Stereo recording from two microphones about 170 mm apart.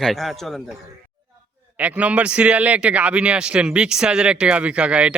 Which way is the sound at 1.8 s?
10° right (ahead or behind).